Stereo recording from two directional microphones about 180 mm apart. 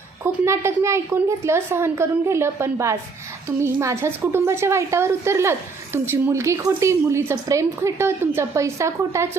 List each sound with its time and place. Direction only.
0.3 s a woman's voice: 15° right (ahead or behind)